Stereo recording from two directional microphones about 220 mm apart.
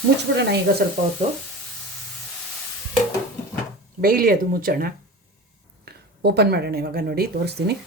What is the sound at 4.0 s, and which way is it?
Speech, 40° right (ahead or behind).